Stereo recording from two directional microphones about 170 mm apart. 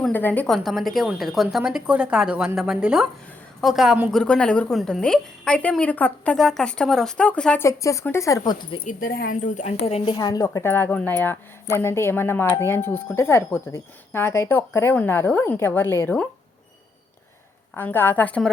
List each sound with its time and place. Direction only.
0.0 s a woman's voice: 10° left (ahead or behind); by 4.1 s 5° right (ahead or behind)
4.1 s a woman's voice: 5° left (ahead or behind)
7.7 s speech: 20° left (ahead or behind)
8.9 s speech: 55° left (ahead or behind)
10.1 s speech: 25° left (ahead or behind)
17.7 s speech: 10° left (ahead or behind)